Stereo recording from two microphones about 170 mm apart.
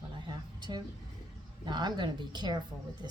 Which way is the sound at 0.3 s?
25° right (ahead or behind).